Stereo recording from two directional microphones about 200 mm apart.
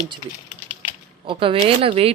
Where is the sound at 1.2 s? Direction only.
25° right (ahead or behind).